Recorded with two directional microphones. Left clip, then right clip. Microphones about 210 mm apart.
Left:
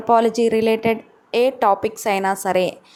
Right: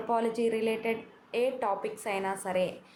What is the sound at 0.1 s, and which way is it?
A woman's voice, 40° left (ahead or behind).